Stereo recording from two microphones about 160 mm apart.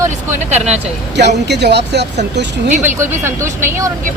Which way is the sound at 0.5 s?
45° right (ahead or behind).